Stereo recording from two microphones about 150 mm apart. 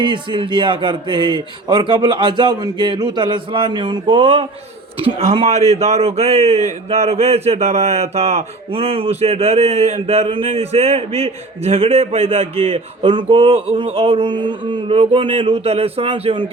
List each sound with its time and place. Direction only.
0.0 s a man's voice: 30° right (ahead or behind)